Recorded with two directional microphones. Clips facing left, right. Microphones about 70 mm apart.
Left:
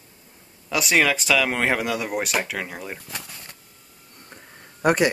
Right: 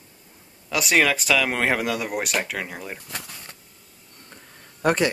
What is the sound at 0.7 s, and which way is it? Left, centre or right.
Speech, centre.